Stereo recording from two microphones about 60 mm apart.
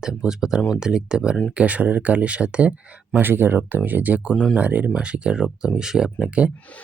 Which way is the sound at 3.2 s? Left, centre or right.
Right.